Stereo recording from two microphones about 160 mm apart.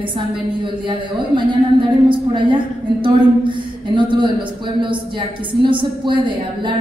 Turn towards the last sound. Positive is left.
turn(degrees=-30)  # may be behind; listen again after turning